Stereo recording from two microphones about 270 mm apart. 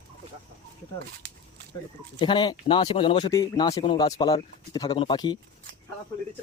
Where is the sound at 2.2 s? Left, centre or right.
Centre.